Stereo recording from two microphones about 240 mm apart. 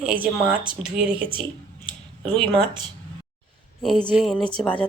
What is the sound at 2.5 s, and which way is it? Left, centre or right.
Speech, centre.